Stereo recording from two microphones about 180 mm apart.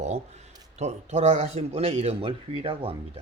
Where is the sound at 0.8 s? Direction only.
40° right (ahead or behind).